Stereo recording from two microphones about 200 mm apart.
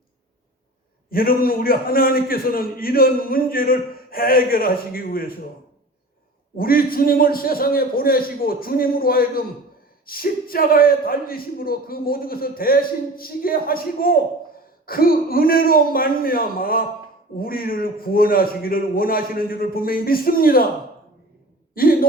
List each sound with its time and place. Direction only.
1.1 s a man's voice: 45° left (ahead or behind)
6.6 s a man's voice: 45° left (ahead or behind)